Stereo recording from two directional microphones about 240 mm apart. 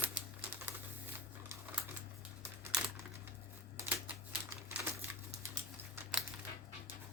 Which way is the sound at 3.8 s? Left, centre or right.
Centre.